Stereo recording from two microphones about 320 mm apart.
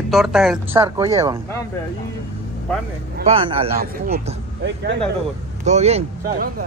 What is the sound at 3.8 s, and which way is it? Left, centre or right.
Speech, right.